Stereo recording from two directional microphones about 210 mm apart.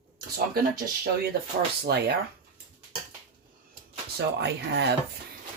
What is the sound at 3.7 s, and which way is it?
Speech, 50° right (ahead or behind).